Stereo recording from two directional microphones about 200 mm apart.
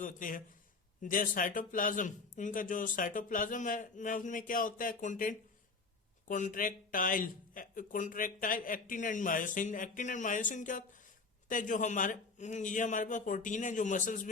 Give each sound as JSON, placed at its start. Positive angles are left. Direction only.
{"t": 0.0, "sound": "speech", "side_deg": 40}